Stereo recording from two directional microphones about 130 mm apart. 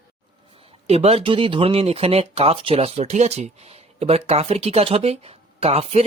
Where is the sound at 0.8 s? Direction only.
50° right (ahead or behind).